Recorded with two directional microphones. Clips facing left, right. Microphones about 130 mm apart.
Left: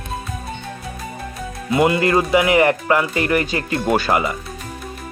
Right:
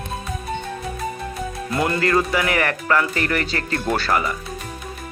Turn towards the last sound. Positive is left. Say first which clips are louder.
# left 3 dB
turn(degrees=20)  # may be behind; listen again after turning